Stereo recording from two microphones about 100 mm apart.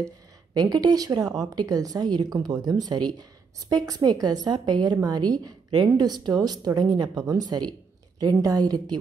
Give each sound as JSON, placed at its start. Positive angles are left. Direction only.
{"t": 0.6, "sound": "a woman's voice", "side_deg": -40}